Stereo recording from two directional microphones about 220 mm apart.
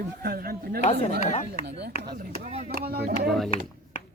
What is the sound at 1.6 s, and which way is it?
Speech, 50° right (ahead or behind).